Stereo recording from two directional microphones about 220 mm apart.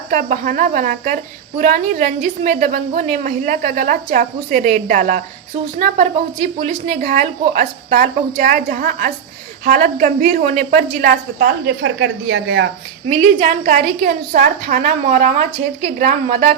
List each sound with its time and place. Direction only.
0.1 s a woman's voice: 40° right (ahead or behind); by 12.6 s 55° right (ahead or behind)
13.1 s a woman's voice: 35° right (ahead or behind)